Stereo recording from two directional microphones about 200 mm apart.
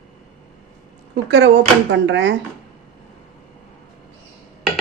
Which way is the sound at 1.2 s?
60° right (ahead or behind).